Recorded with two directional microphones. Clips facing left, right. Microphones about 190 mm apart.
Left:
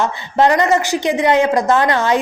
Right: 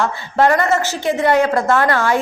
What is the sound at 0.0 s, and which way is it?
A woman's voice, 20° left (ahead or behind).